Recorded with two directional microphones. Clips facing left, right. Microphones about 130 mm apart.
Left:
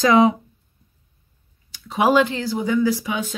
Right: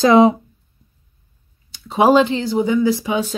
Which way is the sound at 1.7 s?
30° right (ahead or behind).